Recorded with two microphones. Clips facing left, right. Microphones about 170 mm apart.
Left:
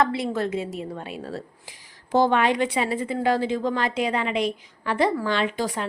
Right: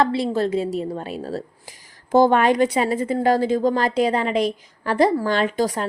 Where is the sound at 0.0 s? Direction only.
30° right (ahead or behind).